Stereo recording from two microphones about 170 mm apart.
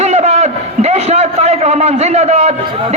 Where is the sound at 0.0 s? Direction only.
40° right (ahead or behind).